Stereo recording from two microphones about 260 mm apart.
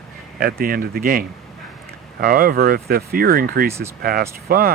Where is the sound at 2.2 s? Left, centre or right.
Right.